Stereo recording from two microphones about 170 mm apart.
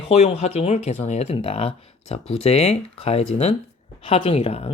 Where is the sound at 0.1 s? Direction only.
35° left (ahead or behind).